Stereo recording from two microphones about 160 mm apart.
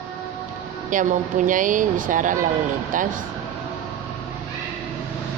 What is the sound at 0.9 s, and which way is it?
Speech, 55° right (ahead or behind).